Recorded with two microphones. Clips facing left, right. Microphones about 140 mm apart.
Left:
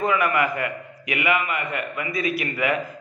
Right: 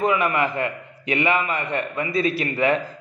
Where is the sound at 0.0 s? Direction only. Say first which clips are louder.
Right 1 dB; 20° right (ahead or behind).